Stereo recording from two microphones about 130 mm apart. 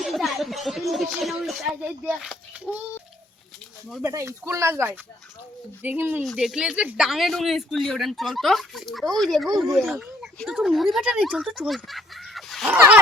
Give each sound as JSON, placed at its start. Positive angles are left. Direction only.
{"t": 0.0, "sound": "speech", "side_deg": 0}
{"t": 4.0, "sound": "speech", "side_deg": -20}
{"t": 6.2, "sound": "speech", "side_deg": -5}
{"t": 12.6, "sound": "speech", "side_deg": -15}